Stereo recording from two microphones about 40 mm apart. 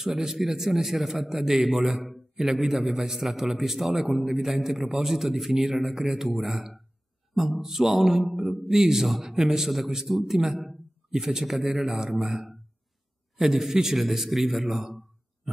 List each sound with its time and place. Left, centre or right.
0.0 s a man's voice: centre
5.5 s a man's voice: centre
5.8 s a man's voice: centre
15.5 s heart sounds: centre